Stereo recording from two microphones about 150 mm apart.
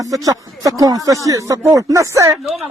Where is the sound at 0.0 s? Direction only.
25° right (ahead or behind).